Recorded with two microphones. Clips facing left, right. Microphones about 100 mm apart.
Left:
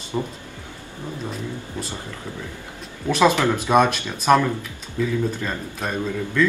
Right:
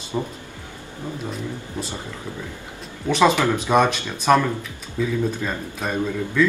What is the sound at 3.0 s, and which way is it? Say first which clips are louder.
Speech: even; 5° left (ahead or behind).